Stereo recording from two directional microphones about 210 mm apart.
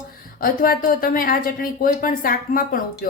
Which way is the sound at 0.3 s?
40° left (ahead or behind).